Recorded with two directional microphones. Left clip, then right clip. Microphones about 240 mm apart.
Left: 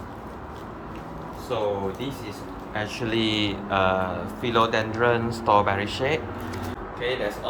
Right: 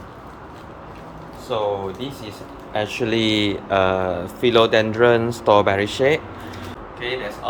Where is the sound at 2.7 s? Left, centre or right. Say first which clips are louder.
Right 6 dB; right.